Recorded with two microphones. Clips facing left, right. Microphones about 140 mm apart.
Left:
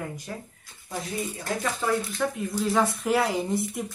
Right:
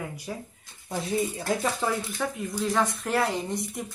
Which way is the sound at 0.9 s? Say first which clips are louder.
Right 4 dB; 25° right (ahead or behind).